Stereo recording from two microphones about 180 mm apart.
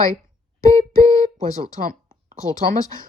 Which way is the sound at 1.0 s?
20° left (ahead or behind).